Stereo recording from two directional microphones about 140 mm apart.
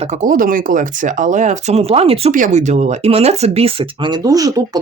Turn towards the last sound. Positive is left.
turn(degrees=-25)  # may be behind; listen again after turning